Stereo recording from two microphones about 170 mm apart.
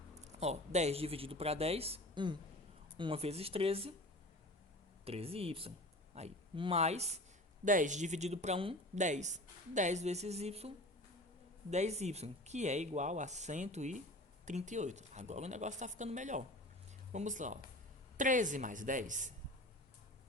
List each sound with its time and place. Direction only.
0.2 s speech: 40° right (ahead or behind)
5.0 s speech: 35° right (ahead or behind)
7.6 s speech: 50° right (ahead or behind)
11.7 s speech: 40° right (ahead or behind)